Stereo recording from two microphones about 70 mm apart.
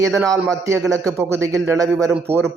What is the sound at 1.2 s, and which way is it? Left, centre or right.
Speech, right.